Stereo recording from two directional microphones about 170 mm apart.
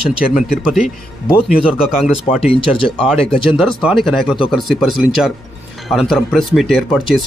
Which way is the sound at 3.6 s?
5° right (ahead or behind).